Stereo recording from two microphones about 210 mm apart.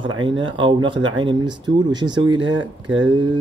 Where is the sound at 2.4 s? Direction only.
80° right.